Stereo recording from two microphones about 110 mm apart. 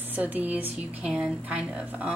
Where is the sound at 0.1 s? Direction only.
15° right (ahead or behind).